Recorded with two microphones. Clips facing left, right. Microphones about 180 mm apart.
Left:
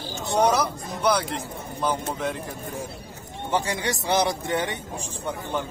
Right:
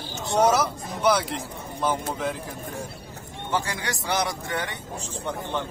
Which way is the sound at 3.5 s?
20° left (ahead or behind).